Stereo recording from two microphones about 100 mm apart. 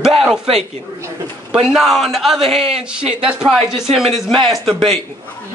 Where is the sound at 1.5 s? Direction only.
5° right (ahead or behind).